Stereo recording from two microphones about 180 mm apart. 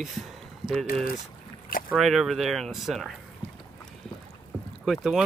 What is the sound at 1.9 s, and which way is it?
Speech, centre (ahead or behind).